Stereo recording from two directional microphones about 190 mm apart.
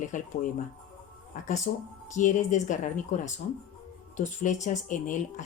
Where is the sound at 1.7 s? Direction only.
40° left (ahead or behind).